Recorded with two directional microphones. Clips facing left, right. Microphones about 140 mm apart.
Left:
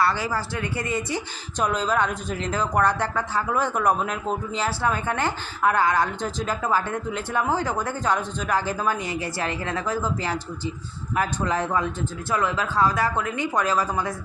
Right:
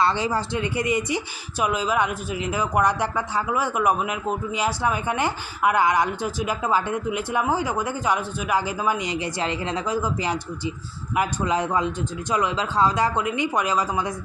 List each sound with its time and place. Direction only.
0.0 s speech: 20° right (ahead or behind)